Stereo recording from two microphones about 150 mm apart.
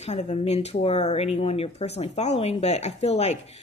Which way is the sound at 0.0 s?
50° left (ahead or behind).